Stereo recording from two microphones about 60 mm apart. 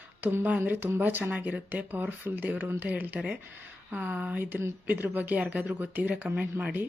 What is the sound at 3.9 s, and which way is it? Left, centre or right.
Speech, right.